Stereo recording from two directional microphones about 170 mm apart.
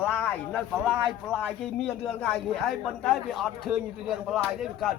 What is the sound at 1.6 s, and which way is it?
A man's voice, centre (ahead or behind).